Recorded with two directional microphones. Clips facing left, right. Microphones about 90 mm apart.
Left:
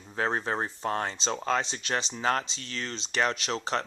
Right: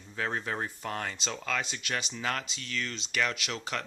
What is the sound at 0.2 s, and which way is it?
Speech, 35° left (ahead or behind).